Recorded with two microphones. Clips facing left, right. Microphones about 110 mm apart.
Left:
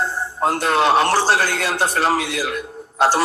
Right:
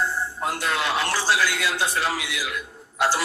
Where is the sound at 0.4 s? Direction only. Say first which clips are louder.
Left 10 dB; 50° left (ahead or behind).